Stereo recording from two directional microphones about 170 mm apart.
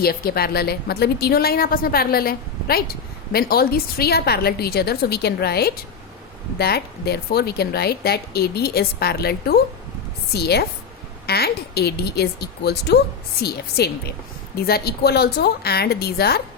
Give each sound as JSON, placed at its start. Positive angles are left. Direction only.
{"t": 0.0, "sound": "a woman's voice", "side_deg": 65}